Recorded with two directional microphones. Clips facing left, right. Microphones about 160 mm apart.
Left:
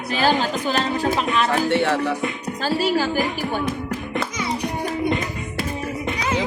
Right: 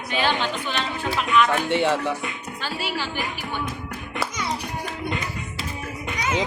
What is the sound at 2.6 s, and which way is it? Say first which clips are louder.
Speech: left 9 dB; 40° left (ahead or behind).